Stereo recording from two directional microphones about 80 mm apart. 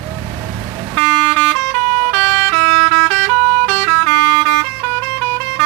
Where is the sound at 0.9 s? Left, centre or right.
Centre.